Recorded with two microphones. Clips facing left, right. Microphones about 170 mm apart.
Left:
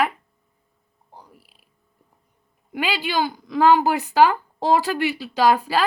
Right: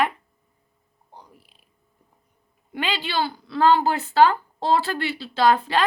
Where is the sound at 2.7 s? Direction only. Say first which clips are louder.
Left 2 dB; 10° left (ahead or behind).